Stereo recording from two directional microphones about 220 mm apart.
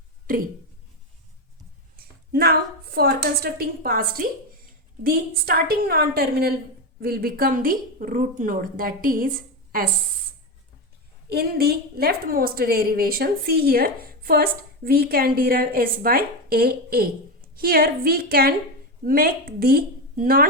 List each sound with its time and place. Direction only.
0.3 s speech: 40° right (ahead or behind)
2.3 s a woman's voice: 45° right (ahead or behind)
11.3 s a woman's voice: 45° right (ahead or behind)